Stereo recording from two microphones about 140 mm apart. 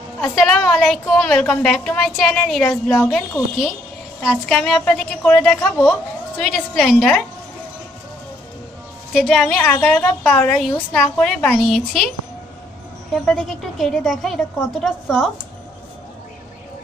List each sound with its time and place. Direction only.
0.2 s a woman's voice: centre (ahead or behind)
2.6 s a woman's voice: 15° left (ahead or behind)
4.2 s a woman's voice: centre (ahead or behind)
6.3 s a woman's voice: 5° left (ahead or behind)
9.1 s a woman's voice: centre (ahead or behind)
11.7 s a woman's voice: centre (ahead or behind)
13.1 s a woman's voice: 5° left (ahead or behind)